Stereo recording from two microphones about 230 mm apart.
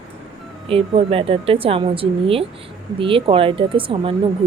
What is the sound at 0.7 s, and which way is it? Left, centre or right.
A woman's voice, right.